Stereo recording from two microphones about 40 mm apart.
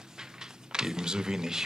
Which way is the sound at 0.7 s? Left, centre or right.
Centre.